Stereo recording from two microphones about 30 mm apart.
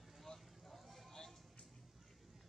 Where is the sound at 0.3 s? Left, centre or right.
Left.